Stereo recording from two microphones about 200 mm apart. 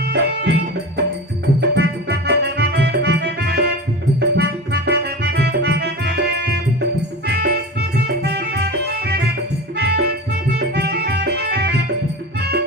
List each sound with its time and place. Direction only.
0.1 s music: 55° right (ahead or behind)
1.7 s music: 55° right (ahead or behind)